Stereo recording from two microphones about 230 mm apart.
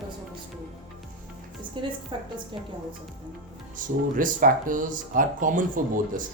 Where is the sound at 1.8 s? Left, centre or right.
Right.